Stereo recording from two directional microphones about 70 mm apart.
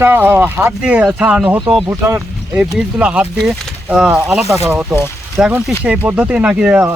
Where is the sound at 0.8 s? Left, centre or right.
Centre.